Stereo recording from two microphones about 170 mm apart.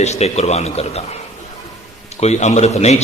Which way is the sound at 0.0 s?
40° left (ahead or behind).